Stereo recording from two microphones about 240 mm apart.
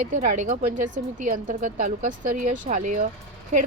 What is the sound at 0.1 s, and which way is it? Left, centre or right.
Speech, right.